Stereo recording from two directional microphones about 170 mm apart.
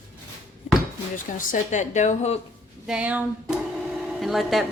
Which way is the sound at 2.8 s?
5° right (ahead or behind).